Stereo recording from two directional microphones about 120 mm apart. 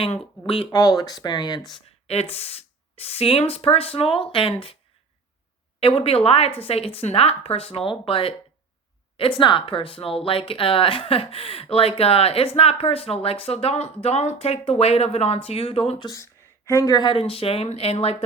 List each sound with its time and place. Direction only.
0.0 s speech: 50° left (ahead or behind)
0.7 s speech: 30° left (ahead or behind)
2.0 s speech: 55° left (ahead or behind)
5.8 s speech: 55° left (ahead or behind)
16.0 s speech: 25° left (ahead or behind); by 18.2 s 55° left (ahead or behind)